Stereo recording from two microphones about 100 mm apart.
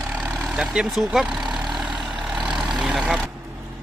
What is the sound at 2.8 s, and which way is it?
Vehicle, 5° right (ahead or behind).